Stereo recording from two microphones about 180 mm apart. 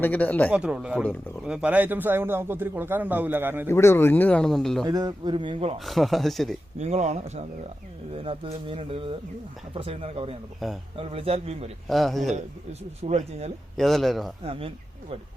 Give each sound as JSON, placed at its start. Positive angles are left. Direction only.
{"t": 0.0, "sound": "speech", "side_deg": 10}
{"t": 0.5, "sound": "a man's voice", "side_deg": -5}
{"t": 3.7, "sound": "speech", "side_deg": 15}
{"t": 4.9, "sound": "speech", "side_deg": -25}
{"t": 5.8, "sound": "speech", "side_deg": 0}
{"t": 6.7, "sound": "speech", "side_deg": -35}
{"t": 10.6, "sound": "speech", "side_deg": 0}
{"t": 10.9, "sound": "speech", "side_deg": -30}
{"t": 11.9, "sound": "speech", "side_deg": 0}
{"t": 13.0, "sound": "speech", "side_deg": -35}
{"t": 13.7, "sound": "speech", "side_deg": 0}
{"t": 14.4, "sound": "speech", "side_deg": -30}